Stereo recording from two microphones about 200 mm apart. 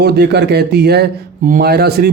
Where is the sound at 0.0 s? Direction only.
55° right (ahead or behind).